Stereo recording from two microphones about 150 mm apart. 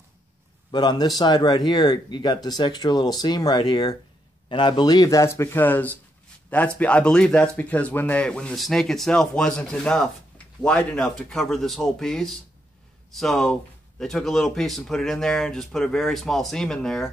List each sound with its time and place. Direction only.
0.7 s speech: 30° left (ahead or behind); by 17.1 s 5° left (ahead or behind)